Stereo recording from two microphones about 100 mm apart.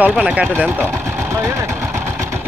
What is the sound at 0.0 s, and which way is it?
Speech, 15° right (ahead or behind).